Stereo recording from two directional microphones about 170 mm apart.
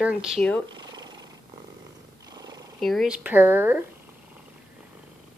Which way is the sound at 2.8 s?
Centre (ahead or behind).